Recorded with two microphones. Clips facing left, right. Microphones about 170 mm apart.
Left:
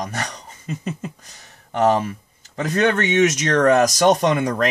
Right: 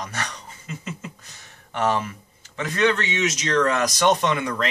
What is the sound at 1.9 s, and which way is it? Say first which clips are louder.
Speech: left 5 dB; 35° left (ahead or behind).